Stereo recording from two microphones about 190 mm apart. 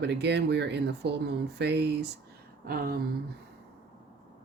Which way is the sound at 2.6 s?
50° right (ahead or behind).